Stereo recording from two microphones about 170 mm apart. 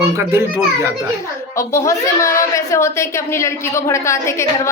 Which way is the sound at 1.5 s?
15° left (ahead or behind).